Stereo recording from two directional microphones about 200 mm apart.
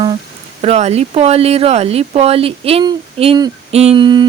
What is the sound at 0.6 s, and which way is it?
Speech, 30° right (ahead or behind).